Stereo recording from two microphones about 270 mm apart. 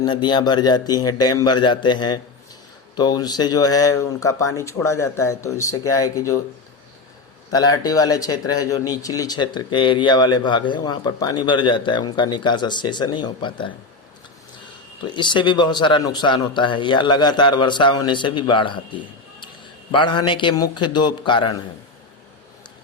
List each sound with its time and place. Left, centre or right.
0.0 s speech: centre
7.5 s speech: centre
15.0 s speech: centre